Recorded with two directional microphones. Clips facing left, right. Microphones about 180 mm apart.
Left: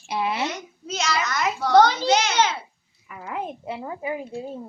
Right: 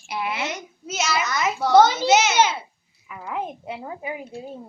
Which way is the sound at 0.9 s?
5° right (ahead or behind).